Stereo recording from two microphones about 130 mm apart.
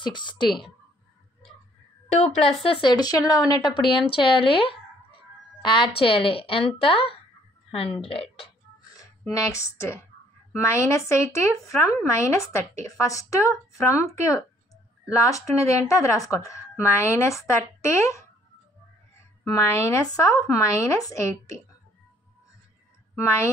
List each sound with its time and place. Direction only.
0.0 s speech: 35° left (ahead or behind)
2.6 s a woman's voice: 40° left (ahead or behind)
9.3 s a woman's voice: 25° left (ahead or behind)
19.4 s a woman's voice: 25° left (ahead or behind)
23.1 s a woman's voice: 20° left (ahead or behind)